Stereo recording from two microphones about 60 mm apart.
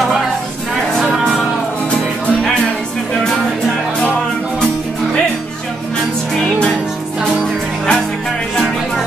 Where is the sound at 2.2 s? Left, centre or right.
Left.